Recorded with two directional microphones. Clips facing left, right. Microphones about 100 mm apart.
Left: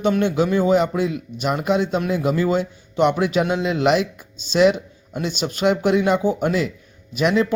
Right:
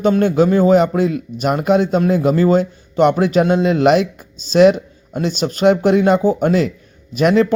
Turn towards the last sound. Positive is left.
turn(degrees=-40)  # may be behind; listen again after turning